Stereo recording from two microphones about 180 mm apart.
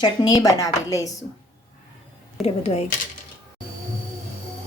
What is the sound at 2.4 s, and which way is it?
Speech, 35° left (ahead or behind).